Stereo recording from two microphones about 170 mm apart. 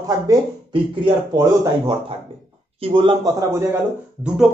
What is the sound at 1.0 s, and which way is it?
Speech, 25° right (ahead or behind).